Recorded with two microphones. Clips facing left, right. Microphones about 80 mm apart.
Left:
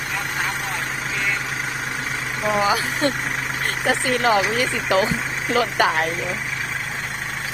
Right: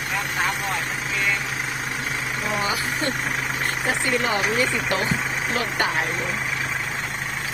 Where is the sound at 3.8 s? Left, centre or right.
Left.